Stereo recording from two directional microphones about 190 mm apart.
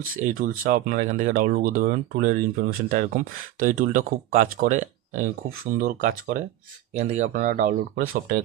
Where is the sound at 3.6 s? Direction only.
45° right (ahead or behind).